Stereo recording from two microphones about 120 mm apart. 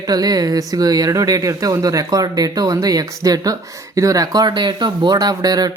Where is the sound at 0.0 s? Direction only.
30° right (ahead or behind).